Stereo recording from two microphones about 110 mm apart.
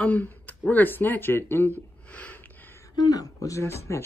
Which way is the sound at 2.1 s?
15° left (ahead or behind).